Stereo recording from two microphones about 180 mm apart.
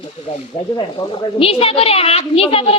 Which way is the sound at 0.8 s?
25° left (ahead or behind).